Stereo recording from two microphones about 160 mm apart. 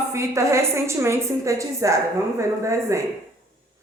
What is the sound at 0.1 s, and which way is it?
A woman's voice, 20° right (ahead or behind).